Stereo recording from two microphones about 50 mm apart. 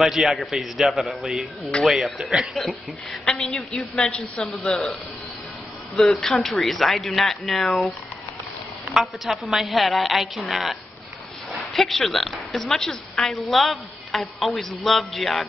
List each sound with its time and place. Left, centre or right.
0.0 s a woman's voice: centre
4.1 s speech: centre
4.6 s a woman's voice: centre
5.9 s a woman's voice: centre
8.9 s a woman's voice: centre